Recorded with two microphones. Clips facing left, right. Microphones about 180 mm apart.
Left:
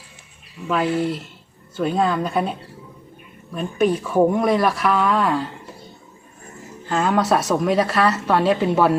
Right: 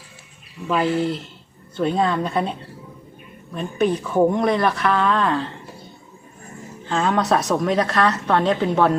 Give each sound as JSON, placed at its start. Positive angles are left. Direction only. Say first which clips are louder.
{"t": 0.7, "sound": "a woman's voice", "louder": "even", "side_deg": 0}
{"t": 3.5, "sound": "speech", "louder": "left 1 dB", "side_deg": 10}
{"t": 6.8, "sound": "a woman's voice", "louder": "left 1 dB", "side_deg": 5}